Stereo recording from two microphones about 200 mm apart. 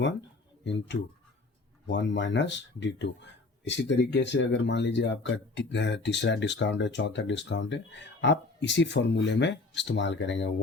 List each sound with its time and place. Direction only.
0.6 s speech: 65° left (ahead or behind)